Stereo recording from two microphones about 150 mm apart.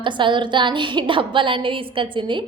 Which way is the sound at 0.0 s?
30° right (ahead or behind).